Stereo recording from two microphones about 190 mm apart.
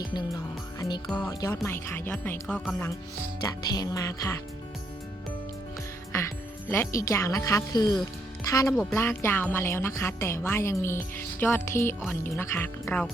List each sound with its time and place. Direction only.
0.0 s music: 25° left (ahead or behind)
1.0 s speech: 5° left (ahead or behind)
1.3 s music: 20° left (ahead or behind)
1.6 s a woman's voice: 10° left (ahead or behind)
3.4 s music: 20° left (ahead or behind)
6.1 s a woman's voice: 15° left (ahead or behind)